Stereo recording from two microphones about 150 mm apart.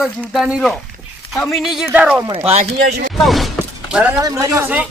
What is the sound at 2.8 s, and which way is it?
Speech, 90° right.